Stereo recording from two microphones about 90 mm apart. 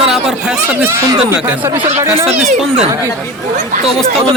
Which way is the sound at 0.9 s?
30° right (ahead or behind).